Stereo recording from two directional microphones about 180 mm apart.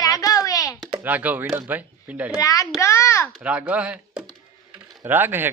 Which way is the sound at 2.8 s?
15° left (ahead or behind).